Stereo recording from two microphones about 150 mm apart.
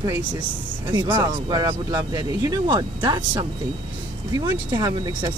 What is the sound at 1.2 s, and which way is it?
Speech, 25° right (ahead or behind).